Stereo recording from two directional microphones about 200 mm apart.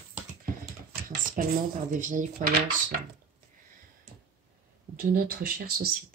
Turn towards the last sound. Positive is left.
turn(degrees=-50)  # may be behind; listen again after turning